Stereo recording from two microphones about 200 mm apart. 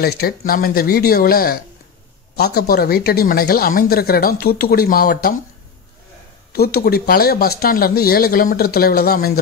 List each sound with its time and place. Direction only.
0.0 s speech: 50° left (ahead or behind)
6.5 s speech: 50° left (ahead or behind)